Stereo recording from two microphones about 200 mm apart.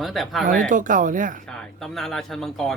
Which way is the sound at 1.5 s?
Centre (ahead or behind).